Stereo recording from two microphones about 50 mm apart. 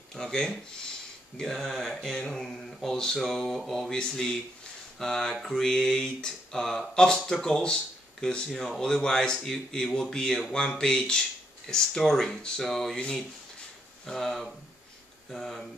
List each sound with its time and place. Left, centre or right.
0.1 s speech: centre
14.0 s speech: centre